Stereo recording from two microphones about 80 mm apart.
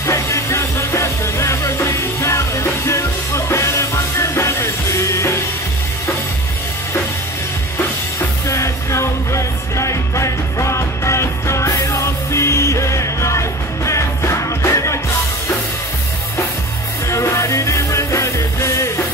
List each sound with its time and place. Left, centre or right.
0.0 s music: left
8.5 s music: left
17.1 s music: left